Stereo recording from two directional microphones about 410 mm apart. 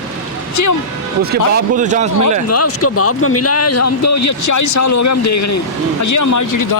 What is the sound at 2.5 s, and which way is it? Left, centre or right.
A man's voice, left.